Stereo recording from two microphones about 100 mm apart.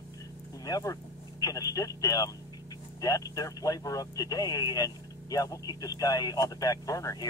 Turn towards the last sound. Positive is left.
turn(degrees=35)  # may be behind; listen again after turning